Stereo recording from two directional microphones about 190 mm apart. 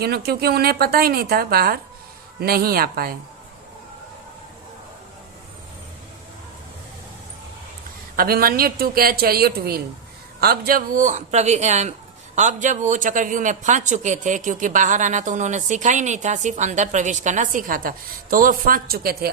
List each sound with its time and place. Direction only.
0.0 s a woman's voice: 55° right (ahead or behind)
8.1 s a woman's voice: 50° right (ahead or behind)